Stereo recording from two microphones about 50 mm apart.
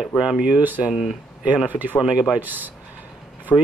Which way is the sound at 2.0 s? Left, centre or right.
Centre.